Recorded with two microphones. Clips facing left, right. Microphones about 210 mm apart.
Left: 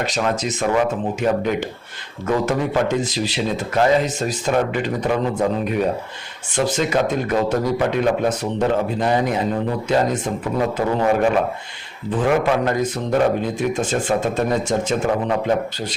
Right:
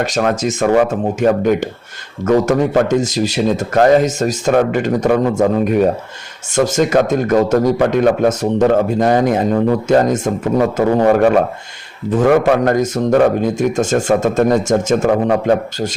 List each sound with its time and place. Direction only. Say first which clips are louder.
0.0 s a man's voice: right 5 dB; 50° right (ahead or behind)